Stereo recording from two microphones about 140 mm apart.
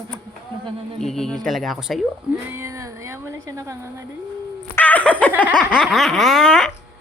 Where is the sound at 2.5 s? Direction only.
20° right (ahead or behind).